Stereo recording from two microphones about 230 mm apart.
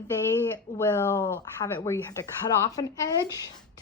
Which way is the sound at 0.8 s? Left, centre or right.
Centre.